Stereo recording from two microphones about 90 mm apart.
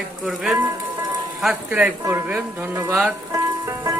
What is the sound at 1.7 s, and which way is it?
Speech, 15° right (ahead or behind).